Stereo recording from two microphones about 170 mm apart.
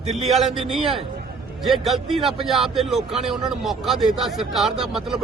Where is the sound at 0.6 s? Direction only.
35° right (ahead or behind).